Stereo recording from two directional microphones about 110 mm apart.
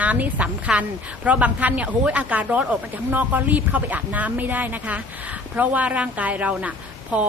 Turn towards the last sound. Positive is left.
turn(degrees=-10)  # may be behind; listen again after turning